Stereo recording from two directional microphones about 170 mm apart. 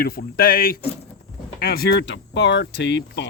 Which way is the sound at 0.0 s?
60° left (ahead or behind).